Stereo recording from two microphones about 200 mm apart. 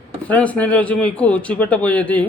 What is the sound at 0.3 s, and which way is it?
A man's voice, 5° left (ahead or behind).